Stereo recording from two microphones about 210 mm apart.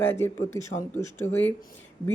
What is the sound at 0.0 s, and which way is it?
A woman's voice, 10° left (ahead or behind).